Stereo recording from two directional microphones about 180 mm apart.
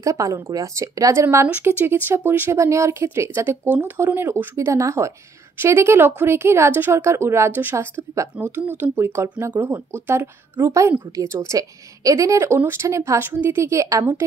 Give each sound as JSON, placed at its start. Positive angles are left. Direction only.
{"t": 0.0, "sound": "speech", "side_deg": -15}